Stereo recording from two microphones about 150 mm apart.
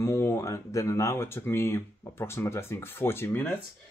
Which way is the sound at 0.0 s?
20° left (ahead or behind).